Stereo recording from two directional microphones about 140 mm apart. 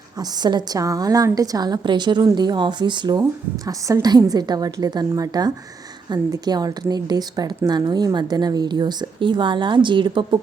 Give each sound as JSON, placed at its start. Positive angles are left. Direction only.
{"t": 0.2, "sound": "a woman's voice", "side_deg": -30}